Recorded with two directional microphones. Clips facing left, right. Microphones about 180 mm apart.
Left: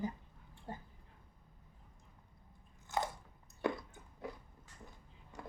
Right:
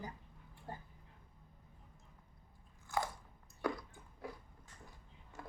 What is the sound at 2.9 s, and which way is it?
Biting, 20° left (ahead or behind).